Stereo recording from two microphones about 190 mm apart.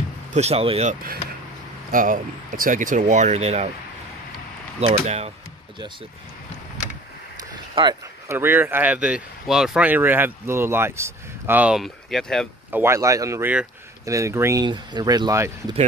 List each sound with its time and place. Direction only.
0.3 s speech: 35° right (ahead or behind)
1.9 s speech: 45° right (ahead or behind)
5.0 s speech: 35° right (ahead or behind)
7.3 s speech: 20° right (ahead or behind); by 12.4 s centre (ahead or behind)
12.7 s speech: 15° right (ahead or behind)